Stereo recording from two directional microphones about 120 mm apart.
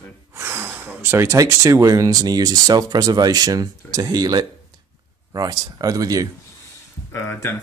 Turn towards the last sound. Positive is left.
turn(degrees=20)  # may be behind; listen again after turning